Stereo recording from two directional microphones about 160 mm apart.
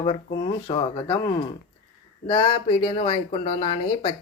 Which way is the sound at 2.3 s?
30° left (ahead or behind).